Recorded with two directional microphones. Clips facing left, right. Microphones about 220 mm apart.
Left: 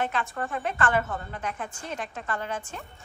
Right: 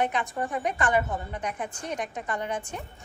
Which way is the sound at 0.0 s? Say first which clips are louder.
Right 2 dB; 15° right (ahead or behind).